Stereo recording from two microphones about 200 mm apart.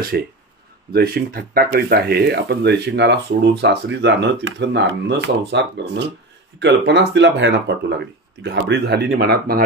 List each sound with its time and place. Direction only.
0.1 s speech: 50° right (ahead or behind)